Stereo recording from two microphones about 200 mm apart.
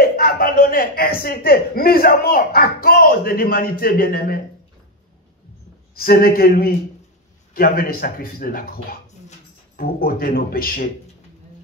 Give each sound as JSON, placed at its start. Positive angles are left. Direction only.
{"t": 0.0, "sound": "speech", "side_deg": 50}
{"t": 5.9, "sound": "speech", "side_deg": 50}
{"t": 9.8, "sound": "speech", "side_deg": 45}